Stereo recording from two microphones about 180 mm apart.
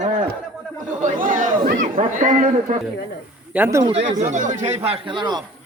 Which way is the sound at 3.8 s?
35° right (ahead or behind).